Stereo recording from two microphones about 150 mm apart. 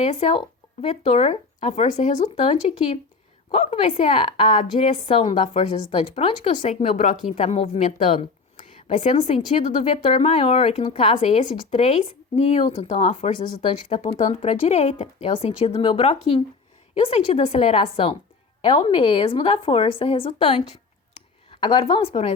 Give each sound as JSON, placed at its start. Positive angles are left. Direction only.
{"t": 0.0, "sound": "speech", "side_deg": 50}
{"t": 4.1, "sound": "speech", "side_deg": 35}
{"t": 8.5, "sound": "a sound", "side_deg": 55}
{"t": 10.1, "sound": "speech", "side_deg": 40}
{"t": 14.2, "sound": "a woman's voice", "side_deg": 50}